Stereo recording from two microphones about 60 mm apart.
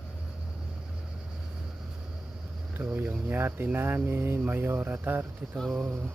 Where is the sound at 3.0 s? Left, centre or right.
Right.